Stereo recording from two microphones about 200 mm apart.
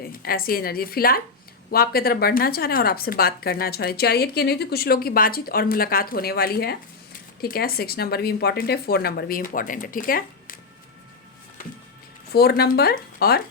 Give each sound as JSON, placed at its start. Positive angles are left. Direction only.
{"t": 0.1, "sound": "speech", "side_deg": 50}
{"t": 12.3, "sound": "speech", "side_deg": 50}